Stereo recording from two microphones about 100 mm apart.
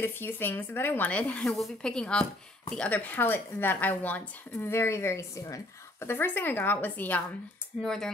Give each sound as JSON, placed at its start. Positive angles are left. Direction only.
{"t": 0.0, "sound": "a woman's voice", "side_deg": 20}
{"t": 7.8, "sound": "speech", "side_deg": 5}